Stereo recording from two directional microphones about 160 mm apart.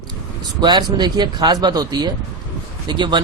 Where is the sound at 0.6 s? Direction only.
30° right (ahead or behind).